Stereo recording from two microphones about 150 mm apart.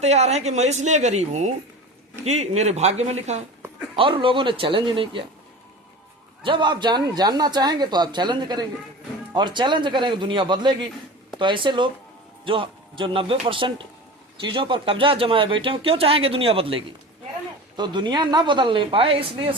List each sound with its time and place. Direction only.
0.0 s speech: 45° right (ahead or behind)
3.9 s speech: 35° right (ahead or behind)
6.4 s speech: 30° right (ahead or behind)